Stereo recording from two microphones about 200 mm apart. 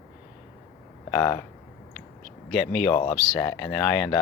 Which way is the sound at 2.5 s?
5° left (ahead or behind).